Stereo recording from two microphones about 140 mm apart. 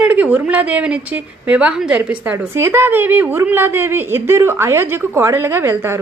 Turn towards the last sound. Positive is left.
turn(degrees=-15)  # may be behind; listen again after turning